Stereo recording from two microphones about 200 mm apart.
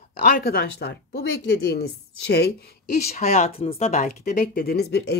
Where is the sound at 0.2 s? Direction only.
50° left (ahead or behind).